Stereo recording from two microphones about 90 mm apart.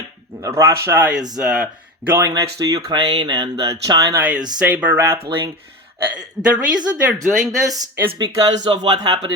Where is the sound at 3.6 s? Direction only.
40° right (ahead or behind).